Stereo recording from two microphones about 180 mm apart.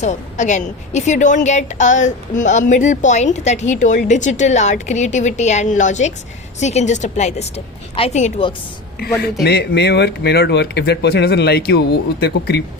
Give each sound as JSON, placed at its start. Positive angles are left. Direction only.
{"t": 0.0, "sound": "a woman's voice", "side_deg": 40}
{"t": 9.4, "sound": "speech", "side_deg": 65}